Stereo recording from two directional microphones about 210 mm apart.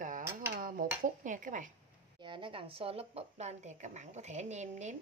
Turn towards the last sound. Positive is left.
turn(degrees=-35)  # may be behind; listen again after turning